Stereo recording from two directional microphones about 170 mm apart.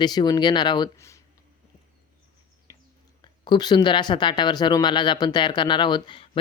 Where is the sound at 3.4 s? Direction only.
25° left (ahead or behind).